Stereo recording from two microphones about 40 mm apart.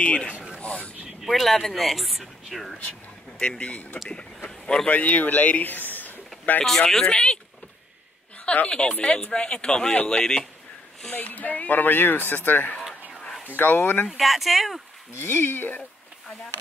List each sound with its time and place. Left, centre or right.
0.0 s speech: left
0.6 s vehicle: left
1.2 s speech: centre
3.3 s a man's voice: left
4.8 s speech: left
6.6 s speech: centre
8.6 s a man's voice: left
11.1 s speech: left
13.6 s speech: left
14.1 s speech: centre
15.3 s speech: left